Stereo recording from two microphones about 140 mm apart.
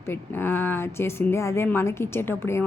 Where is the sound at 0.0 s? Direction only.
15° left (ahead or behind).